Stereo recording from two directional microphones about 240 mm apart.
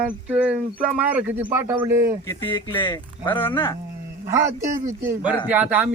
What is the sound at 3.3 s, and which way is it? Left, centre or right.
Speech, centre.